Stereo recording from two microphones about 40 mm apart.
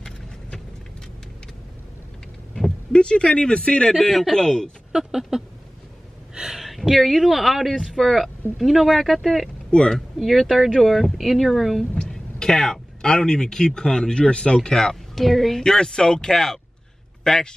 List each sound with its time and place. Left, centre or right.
2.9 s speech: left
4.0 s speech: centre
4.9 s a sound: centre
6.6 s speech: centre
9.7 s a woman's voice: left
9.9 s speech: centre
12.1 s a sound: centre
13.0 s speech: centre
15.1 s a man's voice: centre